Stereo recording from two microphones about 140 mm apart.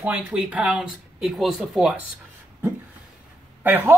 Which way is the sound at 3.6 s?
15° right (ahead or behind).